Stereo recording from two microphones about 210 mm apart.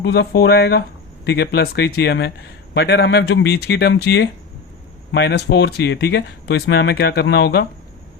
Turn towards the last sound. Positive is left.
turn(degrees=55)  # may be behind; listen again after turning